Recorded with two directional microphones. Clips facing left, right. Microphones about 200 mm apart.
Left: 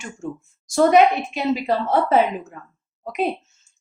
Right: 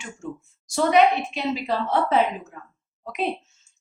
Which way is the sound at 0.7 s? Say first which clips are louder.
Left 4 dB; 45° left (ahead or behind).